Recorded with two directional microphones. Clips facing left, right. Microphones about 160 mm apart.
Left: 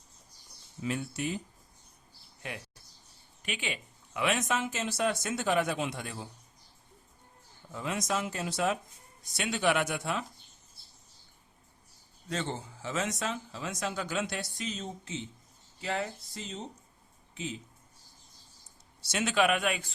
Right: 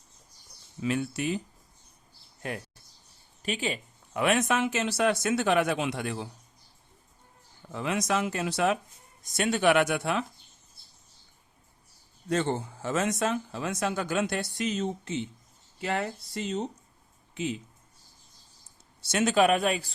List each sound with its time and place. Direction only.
0.8 s speech: 75° right (ahead or behind)
2.4 s speech: 45° right (ahead or behind); by 6.2 s 75° right (ahead or behind)
7.7 s speech: 70° right (ahead or behind)
9.2 s speech: 45° right (ahead or behind); by 10.2 s 70° right (ahead or behind)
12.3 s speech: 55° right (ahead or behind)
19.0 s speech: 45° right (ahead or behind)